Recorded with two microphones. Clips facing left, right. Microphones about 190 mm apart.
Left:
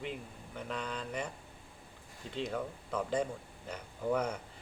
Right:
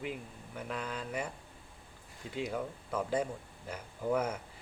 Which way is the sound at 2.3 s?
5° right (ahead or behind).